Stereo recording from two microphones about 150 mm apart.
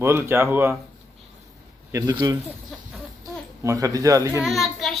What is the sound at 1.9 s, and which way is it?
Speech, 25° right (ahead or behind).